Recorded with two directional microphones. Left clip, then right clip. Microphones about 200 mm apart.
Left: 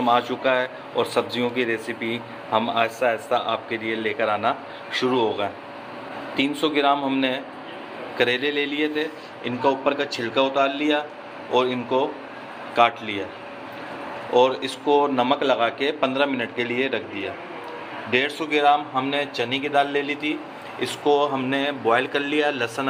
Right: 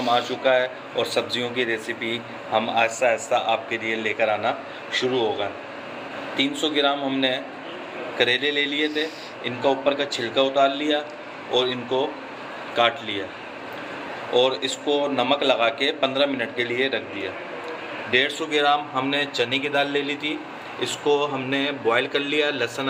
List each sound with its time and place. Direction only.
0.0 s a man's voice: 40° left (ahead or behind)
14.3 s a man's voice: 40° left (ahead or behind)